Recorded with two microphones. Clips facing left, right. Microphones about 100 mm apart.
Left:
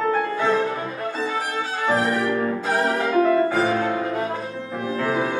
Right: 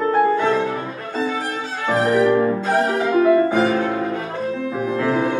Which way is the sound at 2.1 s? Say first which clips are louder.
Right 7 dB; 20° right (ahead or behind).